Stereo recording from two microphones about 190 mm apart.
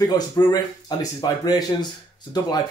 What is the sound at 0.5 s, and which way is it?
Speech, 20° left (ahead or behind).